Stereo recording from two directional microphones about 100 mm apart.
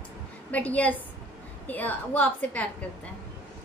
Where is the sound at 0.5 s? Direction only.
15° left (ahead or behind).